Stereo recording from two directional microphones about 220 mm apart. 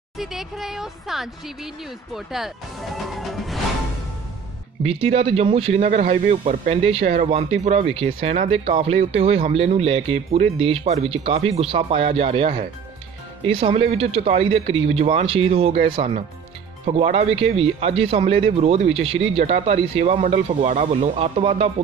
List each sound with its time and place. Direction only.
0.2 s speech: centre (ahead or behind)
4.8 s speech: 25° right (ahead or behind)